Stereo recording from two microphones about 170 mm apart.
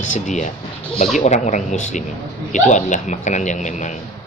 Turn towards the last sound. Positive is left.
turn(degrees=45)  # may be behind; listen again after turning